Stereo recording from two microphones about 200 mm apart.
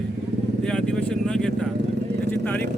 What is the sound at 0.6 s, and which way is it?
Vehicle, 5° left (ahead or behind).